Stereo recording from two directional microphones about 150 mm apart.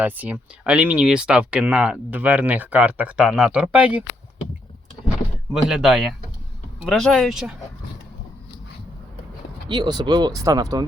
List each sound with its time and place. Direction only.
0.0 s speech: 10° right (ahead or behind)
5.6 s speech: 5° right (ahead or behind)
9.6 s speech: 30° right (ahead or behind)